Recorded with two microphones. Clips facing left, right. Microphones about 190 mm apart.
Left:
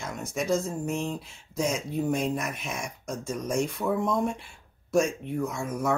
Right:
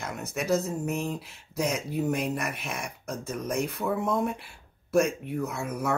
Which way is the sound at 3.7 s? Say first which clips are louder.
Left 1 dB; 5° right (ahead or behind).